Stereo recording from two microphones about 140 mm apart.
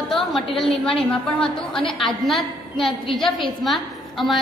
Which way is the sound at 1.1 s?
5° left (ahead or behind).